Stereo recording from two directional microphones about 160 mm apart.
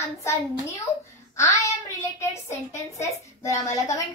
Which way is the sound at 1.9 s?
15° left (ahead or behind).